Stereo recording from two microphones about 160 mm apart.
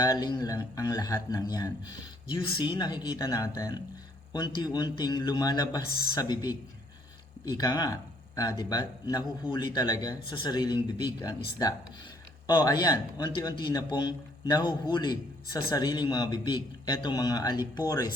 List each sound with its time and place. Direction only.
0.0 s a man's voice: 25° left (ahead or behind)